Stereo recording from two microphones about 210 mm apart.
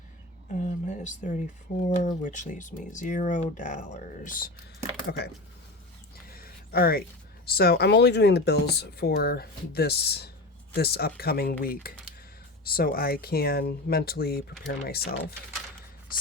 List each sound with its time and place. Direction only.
0.5 s speech: 35° left (ahead or behind)
5.0 s speech: 50° left (ahead or behind)
6.3 s a sound: 45° left (ahead or behind)
7.4 s speech: 45° left (ahead or behind)